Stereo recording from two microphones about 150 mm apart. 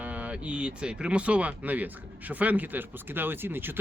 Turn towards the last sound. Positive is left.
turn(degrees=-15)  # may be behind; listen again after turning